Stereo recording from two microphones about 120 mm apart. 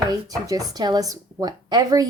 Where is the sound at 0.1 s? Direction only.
30° right (ahead or behind).